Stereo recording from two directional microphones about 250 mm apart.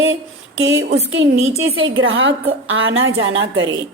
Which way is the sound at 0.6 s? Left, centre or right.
Right.